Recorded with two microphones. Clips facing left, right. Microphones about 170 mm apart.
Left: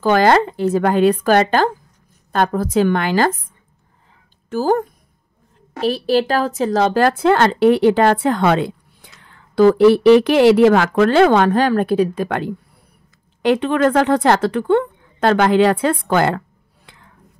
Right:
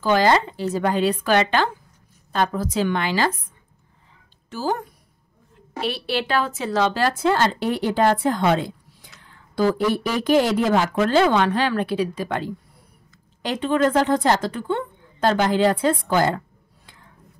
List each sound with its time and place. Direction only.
0.0 s a woman's voice: 55° left (ahead or behind)
4.5 s a woman's voice: 50° left (ahead or behind); by 16.9 s 70° left (ahead or behind)